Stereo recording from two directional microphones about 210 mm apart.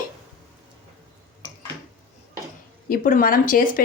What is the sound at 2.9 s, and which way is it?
Speech, 40° left (ahead or behind).